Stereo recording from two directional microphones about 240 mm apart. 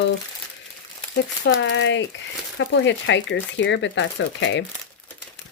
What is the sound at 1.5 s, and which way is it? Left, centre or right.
Speech, left.